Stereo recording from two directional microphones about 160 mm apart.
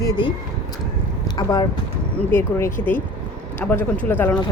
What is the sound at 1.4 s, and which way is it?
Speech, 25° left (ahead or behind).